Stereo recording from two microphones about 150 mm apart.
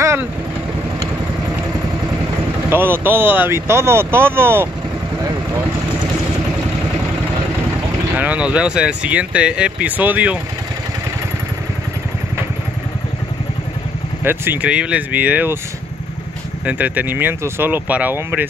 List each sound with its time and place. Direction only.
0.0 s vehicle: 20° right (ahead or behind)
2.7 s speech: 15° right (ahead or behind)
8.2 s speech: 10° right (ahead or behind)
14.2 s speech: 15° right (ahead or behind)
16.6 s speech: 10° right (ahead or behind)